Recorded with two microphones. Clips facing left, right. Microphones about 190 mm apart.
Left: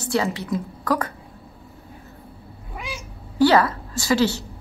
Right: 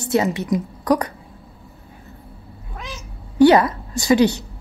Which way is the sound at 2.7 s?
10° left (ahead or behind).